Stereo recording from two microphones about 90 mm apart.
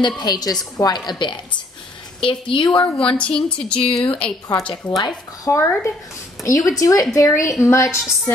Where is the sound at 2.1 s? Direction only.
75° left (ahead or behind).